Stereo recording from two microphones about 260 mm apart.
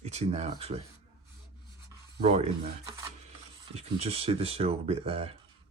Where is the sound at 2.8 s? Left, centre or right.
Centre.